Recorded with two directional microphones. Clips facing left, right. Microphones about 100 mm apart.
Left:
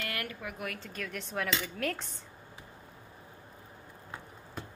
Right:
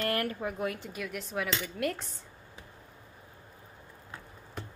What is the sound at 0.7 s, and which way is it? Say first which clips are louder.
Speech: right 2 dB; 10° right (ahead or behind).